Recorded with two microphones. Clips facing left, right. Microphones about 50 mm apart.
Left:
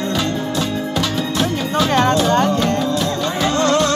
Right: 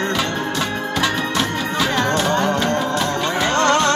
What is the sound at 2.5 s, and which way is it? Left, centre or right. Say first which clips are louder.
Music: left 1 dB; right.